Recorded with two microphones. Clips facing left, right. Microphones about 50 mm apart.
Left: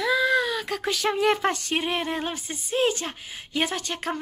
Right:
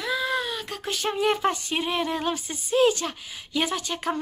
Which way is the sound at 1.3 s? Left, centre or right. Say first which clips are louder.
Even; left.